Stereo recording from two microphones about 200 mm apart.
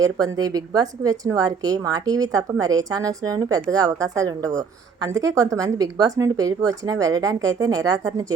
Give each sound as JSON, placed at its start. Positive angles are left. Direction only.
{"t": 0.0, "sound": "speech", "side_deg": -20}